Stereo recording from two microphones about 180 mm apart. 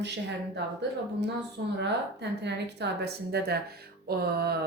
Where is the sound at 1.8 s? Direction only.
70° right (ahead or behind).